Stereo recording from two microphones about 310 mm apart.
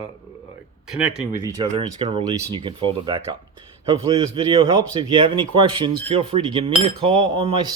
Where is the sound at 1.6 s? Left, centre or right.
Centre.